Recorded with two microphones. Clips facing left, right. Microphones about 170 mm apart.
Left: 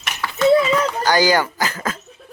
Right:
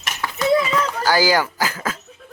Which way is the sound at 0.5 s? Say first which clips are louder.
Left 1 dB; 30° left (ahead or behind).